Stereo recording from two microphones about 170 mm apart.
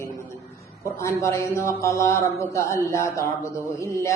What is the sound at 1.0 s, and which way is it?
A man's voice, 15° left (ahead or behind).